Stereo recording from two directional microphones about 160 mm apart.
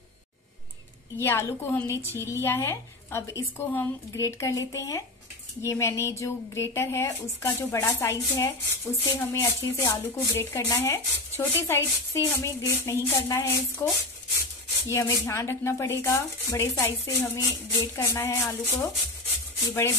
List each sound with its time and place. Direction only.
1.1 s speech: 15° left (ahead or behind)
14.9 s speech: 15° left (ahead or behind)